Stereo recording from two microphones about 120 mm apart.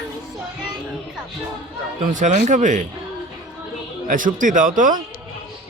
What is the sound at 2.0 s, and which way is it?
Speech, 90° right.